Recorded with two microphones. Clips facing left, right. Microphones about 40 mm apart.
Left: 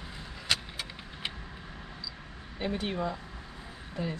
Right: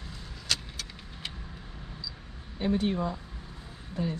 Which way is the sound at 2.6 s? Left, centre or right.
Left.